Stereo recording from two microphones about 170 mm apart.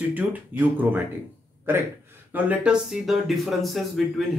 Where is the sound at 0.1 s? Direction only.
10° right (ahead or behind).